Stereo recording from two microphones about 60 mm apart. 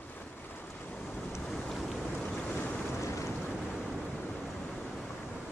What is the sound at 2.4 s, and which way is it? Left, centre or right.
Boat, left.